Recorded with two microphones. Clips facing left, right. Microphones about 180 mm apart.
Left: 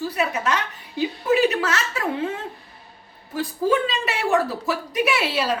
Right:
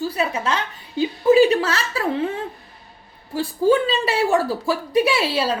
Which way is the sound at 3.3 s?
30° right (ahead or behind).